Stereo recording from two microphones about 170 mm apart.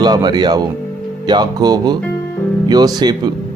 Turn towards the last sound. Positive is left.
turn(degrees=-25)  # may be behind; listen again after turning